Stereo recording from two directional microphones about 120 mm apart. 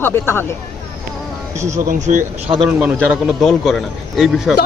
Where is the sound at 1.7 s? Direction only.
90° right.